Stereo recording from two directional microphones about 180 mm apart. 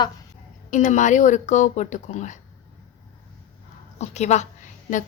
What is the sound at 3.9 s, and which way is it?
A woman's voice, 40° left (ahead or behind).